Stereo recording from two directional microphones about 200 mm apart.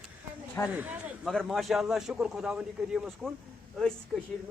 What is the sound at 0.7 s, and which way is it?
Speech, 10° right (ahead or behind).